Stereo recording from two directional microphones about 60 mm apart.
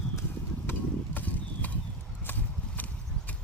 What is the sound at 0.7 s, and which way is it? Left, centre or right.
Horse, left.